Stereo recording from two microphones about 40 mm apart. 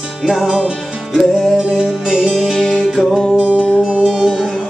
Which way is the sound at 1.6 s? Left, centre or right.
Centre.